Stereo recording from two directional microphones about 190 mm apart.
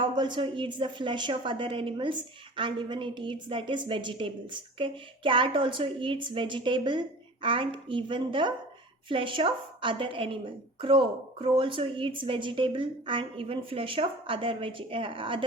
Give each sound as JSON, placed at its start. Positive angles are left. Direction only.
{"t": 0.0, "sound": "a woman's voice", "side_deg": -25}